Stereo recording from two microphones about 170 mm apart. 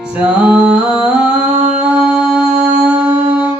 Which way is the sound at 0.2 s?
5° right (ahead or behind).